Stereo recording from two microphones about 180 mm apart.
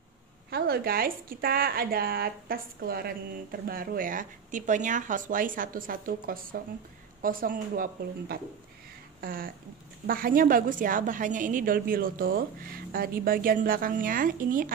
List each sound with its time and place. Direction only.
0.5 s a woman's voice: 60° right (ahead or behind)